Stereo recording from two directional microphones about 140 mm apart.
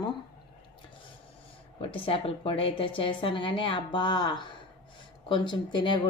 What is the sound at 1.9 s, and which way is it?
Speech, 40° left (ahead or behind).